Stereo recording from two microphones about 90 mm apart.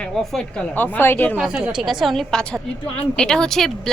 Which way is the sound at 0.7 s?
20° left (ahead or behind).